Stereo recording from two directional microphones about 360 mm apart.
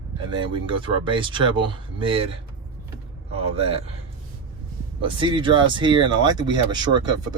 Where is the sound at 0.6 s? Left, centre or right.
Centre.